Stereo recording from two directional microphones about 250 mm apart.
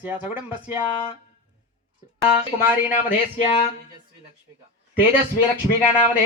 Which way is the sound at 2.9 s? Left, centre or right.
Left.